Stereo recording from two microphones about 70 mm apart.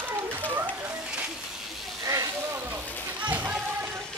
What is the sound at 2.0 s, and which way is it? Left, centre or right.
Sheep, right.